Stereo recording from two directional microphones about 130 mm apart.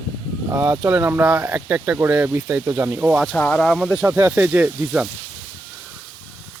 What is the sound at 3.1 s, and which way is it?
Speech, 5° left (ahead or behind).